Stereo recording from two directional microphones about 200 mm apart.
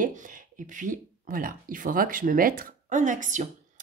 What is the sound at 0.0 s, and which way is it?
Speech, 40° right (ahead or behind).